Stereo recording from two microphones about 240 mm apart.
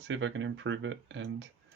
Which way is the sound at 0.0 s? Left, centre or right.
Right.